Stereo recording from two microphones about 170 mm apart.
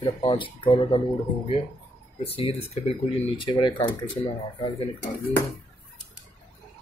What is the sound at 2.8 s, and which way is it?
Speech, 35° left (ahead or behind).